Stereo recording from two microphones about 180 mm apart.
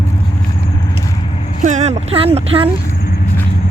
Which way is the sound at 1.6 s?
40° right (ahead or behind).